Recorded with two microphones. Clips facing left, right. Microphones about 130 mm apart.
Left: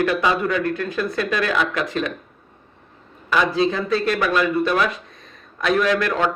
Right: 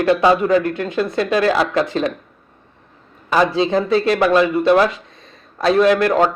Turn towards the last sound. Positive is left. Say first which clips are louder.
# right 6 dB
turn(degrees=-35)  # may be behind; listen again after turning